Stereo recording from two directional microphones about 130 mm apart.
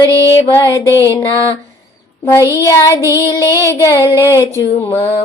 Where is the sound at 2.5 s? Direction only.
20° left (ahead or behind).